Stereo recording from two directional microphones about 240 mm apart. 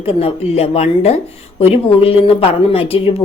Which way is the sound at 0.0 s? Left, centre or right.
Left.